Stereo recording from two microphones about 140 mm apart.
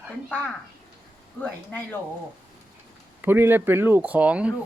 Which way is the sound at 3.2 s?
15° right (ahead or behind).